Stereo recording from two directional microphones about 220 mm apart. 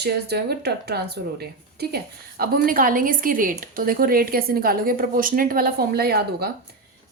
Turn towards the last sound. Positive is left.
turn(degrees=-45)  # may be behind; listen again after turning